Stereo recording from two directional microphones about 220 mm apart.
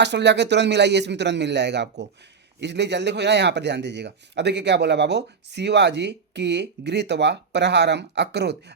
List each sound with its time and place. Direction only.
0.0 s a man's voice: 50° right (ahead or behind)